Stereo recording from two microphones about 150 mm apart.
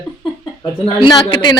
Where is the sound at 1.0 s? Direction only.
30° left (ahead or behind).